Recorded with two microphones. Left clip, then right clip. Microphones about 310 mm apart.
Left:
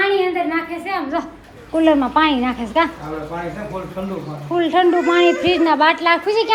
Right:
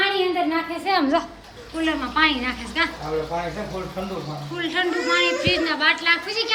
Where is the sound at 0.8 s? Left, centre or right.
Centre.